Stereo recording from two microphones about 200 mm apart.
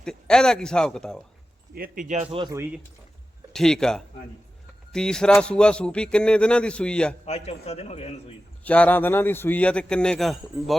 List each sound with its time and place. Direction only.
0.0 s speech: 5° left (ahead or behind)
1.7 s speech: 45° right (ahead or behind)
2.3 s speech: 25° right (ahead or behind)
3.5 s speech: centre (ahead or behind)
7.3 s a man's voice: 30° left (ahead or behind)
8.6 s a man's voice: 5° left (ahead or behind)